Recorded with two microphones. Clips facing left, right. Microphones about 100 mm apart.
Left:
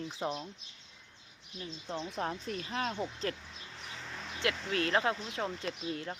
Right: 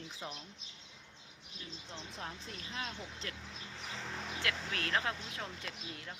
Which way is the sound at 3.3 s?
40° left (ahead or behind).